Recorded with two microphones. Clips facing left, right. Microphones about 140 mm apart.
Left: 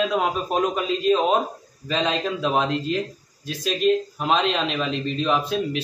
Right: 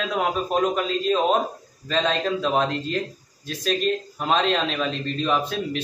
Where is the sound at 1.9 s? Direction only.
5° left (ahead or behind).